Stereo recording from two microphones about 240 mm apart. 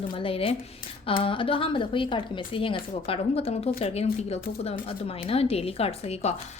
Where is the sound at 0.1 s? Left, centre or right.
Left.